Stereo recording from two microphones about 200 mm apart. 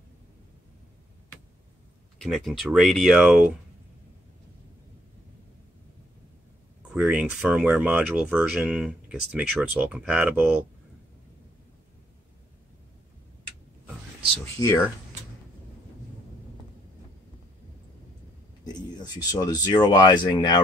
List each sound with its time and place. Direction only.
2.1 s speech: centre (ahead or behind)
6.9 s speech: centre (ahead or behind)
14.4 s speech: 15° left (ahead or behind)
18.8 s speech: 20° left (ahead or behind)